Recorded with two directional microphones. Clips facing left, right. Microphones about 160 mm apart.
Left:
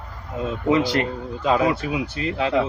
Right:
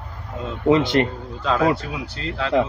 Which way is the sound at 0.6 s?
25° right (ahead or behind).